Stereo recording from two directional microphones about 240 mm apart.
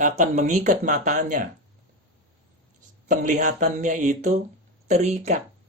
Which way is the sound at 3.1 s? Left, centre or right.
Right.